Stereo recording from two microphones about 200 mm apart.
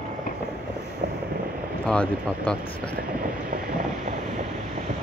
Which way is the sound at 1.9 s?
5° left (ahead or behind).